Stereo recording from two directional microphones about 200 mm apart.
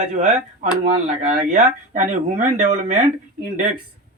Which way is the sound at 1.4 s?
40° right (ahead or behind).